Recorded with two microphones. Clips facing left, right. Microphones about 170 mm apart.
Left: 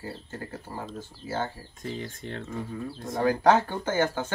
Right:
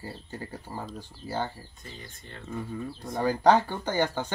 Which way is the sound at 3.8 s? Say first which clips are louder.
Left 1 dB; 15° right (ahead or behind).